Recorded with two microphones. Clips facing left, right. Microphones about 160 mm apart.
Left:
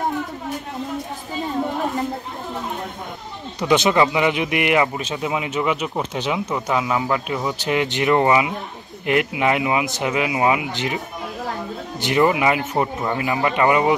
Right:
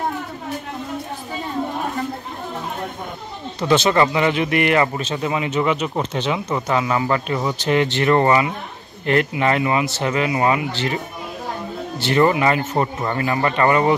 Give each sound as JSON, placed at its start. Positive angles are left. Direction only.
{"t": 3.5, "sound": "speech", "side_deg": 15}
{"t": 12.2, "sound": "speech", "side_deg": 10}